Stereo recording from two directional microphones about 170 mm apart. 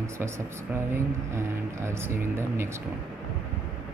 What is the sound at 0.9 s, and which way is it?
Speech, 15° right (ahead or behind).